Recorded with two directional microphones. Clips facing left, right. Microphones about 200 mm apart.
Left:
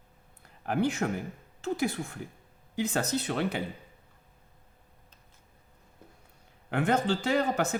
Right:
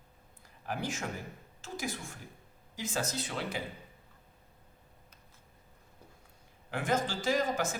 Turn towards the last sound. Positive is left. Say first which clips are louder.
# left 4 dB
turn(degrees=65)  # may be behind; listen again after turning